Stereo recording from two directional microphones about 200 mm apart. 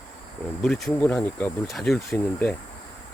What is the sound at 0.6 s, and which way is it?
Speech, 5° left (ahead or behind).